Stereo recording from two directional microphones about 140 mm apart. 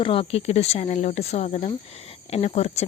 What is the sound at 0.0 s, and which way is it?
Speech, 40° left (ahead or behind).